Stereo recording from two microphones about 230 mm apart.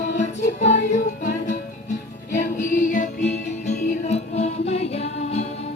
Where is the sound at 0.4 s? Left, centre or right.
Left.